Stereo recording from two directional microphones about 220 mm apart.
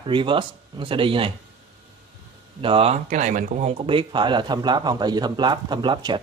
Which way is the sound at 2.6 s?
25° right (ahead or behind).